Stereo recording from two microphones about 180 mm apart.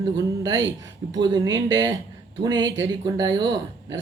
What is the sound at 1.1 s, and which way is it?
Speech, 25° right (ahead or behind).